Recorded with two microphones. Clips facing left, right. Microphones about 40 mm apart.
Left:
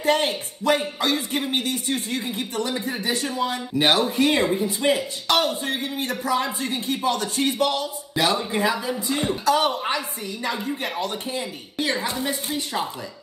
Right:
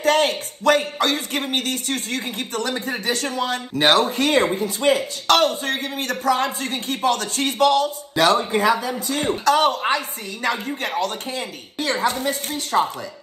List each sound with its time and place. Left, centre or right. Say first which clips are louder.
0.0 s speech: right 3 dB; right